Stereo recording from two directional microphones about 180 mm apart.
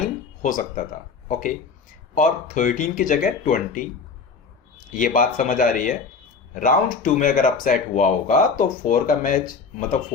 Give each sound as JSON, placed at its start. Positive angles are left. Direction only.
{"t": 0.4, "sound": "speech", "side_deg": 50}
{"t": 4.9, "sound": "speech", "side_deg": 50}